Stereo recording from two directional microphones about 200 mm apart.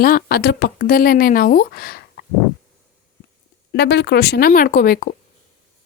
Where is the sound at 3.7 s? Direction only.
60° left (ahead or behind).